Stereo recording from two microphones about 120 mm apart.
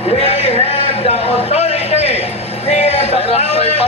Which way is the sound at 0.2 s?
60° left (ahead or behind).